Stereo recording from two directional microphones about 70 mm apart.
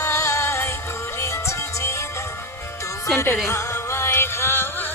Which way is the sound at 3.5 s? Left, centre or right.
Left.